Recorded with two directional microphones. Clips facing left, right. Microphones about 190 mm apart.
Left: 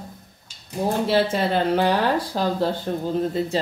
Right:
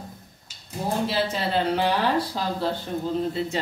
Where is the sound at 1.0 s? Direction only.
50° left (ahead or behind).